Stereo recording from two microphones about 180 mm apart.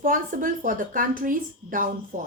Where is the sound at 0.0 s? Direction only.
50° right (ahead or behind).